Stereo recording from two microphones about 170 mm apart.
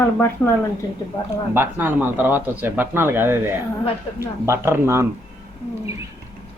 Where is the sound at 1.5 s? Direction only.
15° right (ahead or behind).